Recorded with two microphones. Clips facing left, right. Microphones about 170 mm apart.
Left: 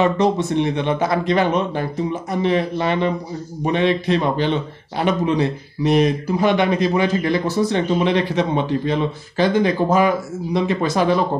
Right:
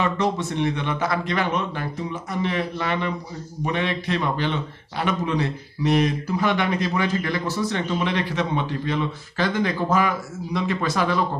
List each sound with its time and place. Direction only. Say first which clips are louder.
0.0 s speech: left 6 dB; 25° left (ahead or behind)